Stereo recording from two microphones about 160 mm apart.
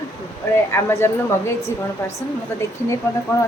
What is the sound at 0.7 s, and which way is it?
Speech, 15° left (ahead or behind).